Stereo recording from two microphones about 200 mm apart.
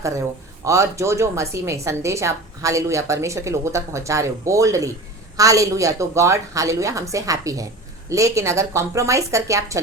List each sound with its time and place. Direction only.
0.0 s speech: 15° right (ahead or behind)